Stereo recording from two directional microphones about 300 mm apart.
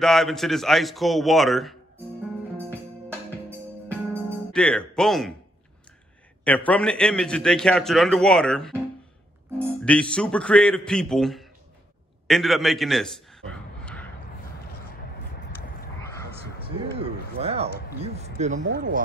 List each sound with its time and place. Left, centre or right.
0.0 s a man's voice: centre
4.1 s music: centre
6.4 s a man's voice: centre
9.8 s a man's voice: centre
13.5 s a sound: centre
17.0 s a sound: centre
18.6 s speech: right